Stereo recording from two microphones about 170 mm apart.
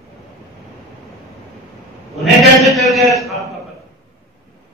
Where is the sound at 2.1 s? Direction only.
Centre (ahead or behind).